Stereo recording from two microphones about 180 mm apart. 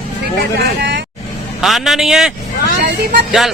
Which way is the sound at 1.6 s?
Centre (ahead or behind).